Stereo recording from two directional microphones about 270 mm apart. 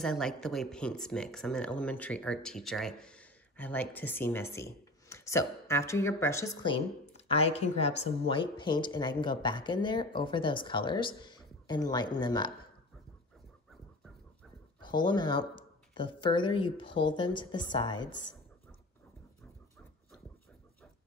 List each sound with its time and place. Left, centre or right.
0.0 s speech: centre
14.8 s speech: centre